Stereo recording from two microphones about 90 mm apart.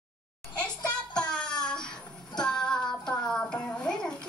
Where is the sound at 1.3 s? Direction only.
10° left (ahead or behind).